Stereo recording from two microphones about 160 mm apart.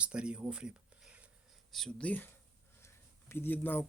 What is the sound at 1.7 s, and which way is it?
Speech, 5° left (ahead or behind).